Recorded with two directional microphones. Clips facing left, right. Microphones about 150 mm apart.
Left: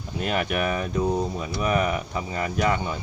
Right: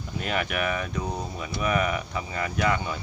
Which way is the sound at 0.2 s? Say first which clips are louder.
Left 3 dB; 35° left (ahead or behind).